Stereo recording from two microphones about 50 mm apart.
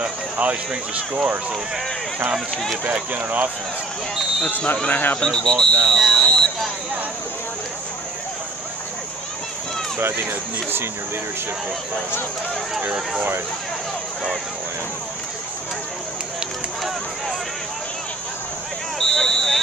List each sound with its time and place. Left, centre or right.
0.0 s speech: right
2.8 s speech: right
4.5 s speech: left
5.2 s speech: centre
18.9 s a sound: centre